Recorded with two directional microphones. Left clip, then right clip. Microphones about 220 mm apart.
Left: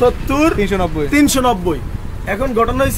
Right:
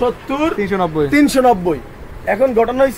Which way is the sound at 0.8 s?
5° left (ahead or behind).